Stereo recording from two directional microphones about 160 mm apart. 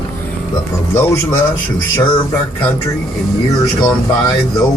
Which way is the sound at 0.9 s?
15° left (ahead or behind).